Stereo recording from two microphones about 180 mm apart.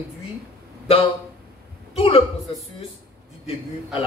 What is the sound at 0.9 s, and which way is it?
Speech, 30° left (ahead or behind).